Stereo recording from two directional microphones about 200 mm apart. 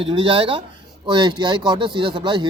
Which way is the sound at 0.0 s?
25° right (ahead or behind).